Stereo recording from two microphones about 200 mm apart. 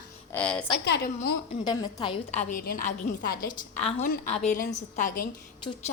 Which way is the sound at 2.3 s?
40° left (ahead or behind).